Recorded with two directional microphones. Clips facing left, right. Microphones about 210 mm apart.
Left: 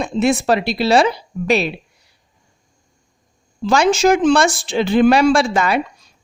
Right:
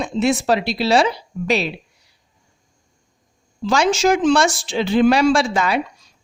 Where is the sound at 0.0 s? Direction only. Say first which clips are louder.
Left 2 dB; 55° left (ahead or behind).